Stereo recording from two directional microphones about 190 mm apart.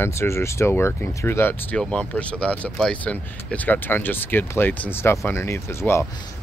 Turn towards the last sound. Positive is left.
turn(degrees=15)  # may be behind; listen again after turning